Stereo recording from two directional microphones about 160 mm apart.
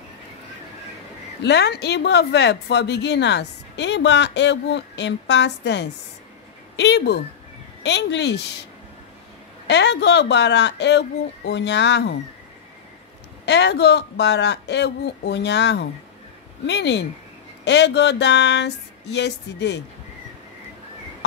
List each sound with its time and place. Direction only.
1.4 s speech: 90° left
9.7 s speech: 90° left
13.5 s speech: 90° left